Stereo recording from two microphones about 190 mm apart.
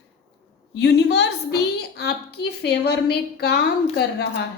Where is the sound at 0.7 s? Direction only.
60° left (ahead or behind).